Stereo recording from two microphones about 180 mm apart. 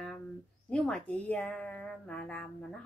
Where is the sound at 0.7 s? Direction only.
5° left (ahead or behind).